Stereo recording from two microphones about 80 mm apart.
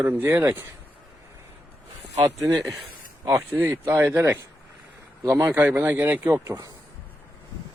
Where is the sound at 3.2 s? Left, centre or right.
Right.